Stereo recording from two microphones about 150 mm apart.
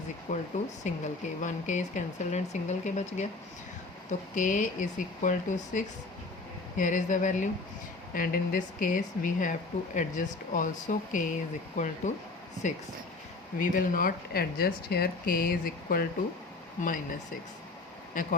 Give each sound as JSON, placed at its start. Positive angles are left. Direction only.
{"t": 0.3, "sound": "speech", "side_deg": 55}
{"t": 4.4, "sound": "speech", "side_deg": 60}
{"t": 8.1, "sound": "speech", "side_deg": 70}
{"t": 13.6, "sound": "speech", "side_deg": 65}
{"t": 16.8, "sound": "speech", "side_deg": 65}